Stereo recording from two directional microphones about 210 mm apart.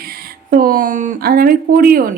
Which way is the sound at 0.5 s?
40° right (ahead or behind).